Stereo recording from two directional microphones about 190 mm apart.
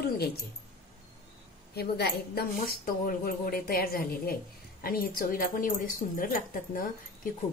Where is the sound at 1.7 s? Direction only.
55° left (ahead or behind).